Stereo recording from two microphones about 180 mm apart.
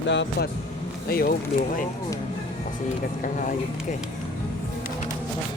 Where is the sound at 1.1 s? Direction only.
55° left (ahead or behind).